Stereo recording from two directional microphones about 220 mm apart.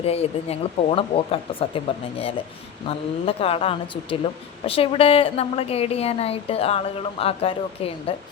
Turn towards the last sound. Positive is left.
turn(degrees=25)  # may be behind; listen again after turning